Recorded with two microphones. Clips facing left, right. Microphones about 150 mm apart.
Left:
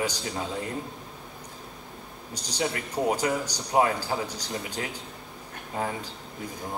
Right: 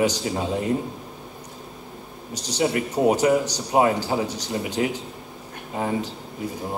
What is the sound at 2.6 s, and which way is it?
A man's voice, 20° right (ahead or behind).